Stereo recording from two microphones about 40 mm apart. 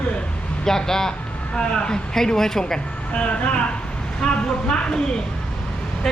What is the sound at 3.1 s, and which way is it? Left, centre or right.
Speech, left.